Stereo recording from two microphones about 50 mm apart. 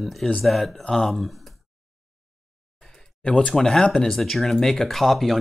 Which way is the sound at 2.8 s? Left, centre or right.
Centre.